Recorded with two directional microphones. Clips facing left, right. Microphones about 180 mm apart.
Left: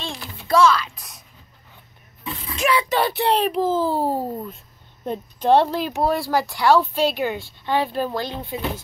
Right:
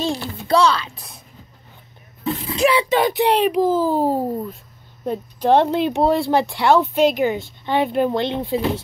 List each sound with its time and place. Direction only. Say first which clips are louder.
0.0 s speech: right 10 dB; 40° right (ahead or behind)
2.2 s speech: right 5 dB; 30° right (ahead or behind)
3.0 s a child's voice: right 4 dB; 15° right (ahead or behind)